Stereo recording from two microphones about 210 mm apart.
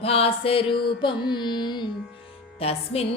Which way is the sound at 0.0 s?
30° left (ahead or behind).